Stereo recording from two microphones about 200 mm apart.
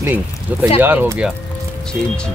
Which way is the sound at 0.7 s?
10° right (ahead or behind).